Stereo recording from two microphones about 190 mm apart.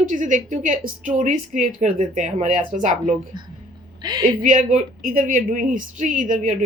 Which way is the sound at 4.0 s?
20° right (ahead or behind).